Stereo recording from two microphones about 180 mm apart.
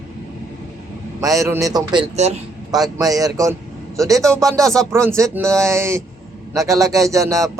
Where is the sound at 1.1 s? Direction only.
20° right (ahead or behind).